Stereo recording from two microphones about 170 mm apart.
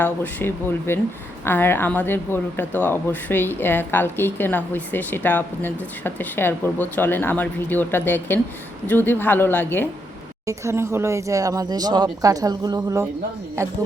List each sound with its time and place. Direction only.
0.0 s speech: 10° left (ahead or behind)
10.4 s speech: 20° right (ahead or behind)